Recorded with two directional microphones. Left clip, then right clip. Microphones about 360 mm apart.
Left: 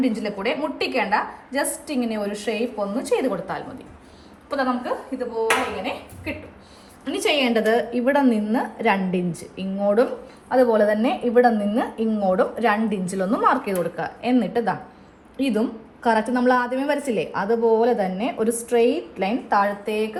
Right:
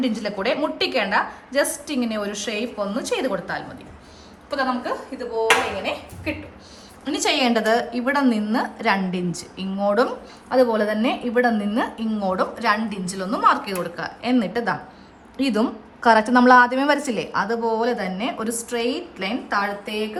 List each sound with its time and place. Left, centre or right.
0.4 s a woman's voice: centre